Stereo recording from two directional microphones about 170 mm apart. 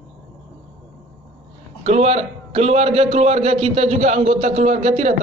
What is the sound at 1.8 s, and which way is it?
A man's voice, 35° right (ahead or behind).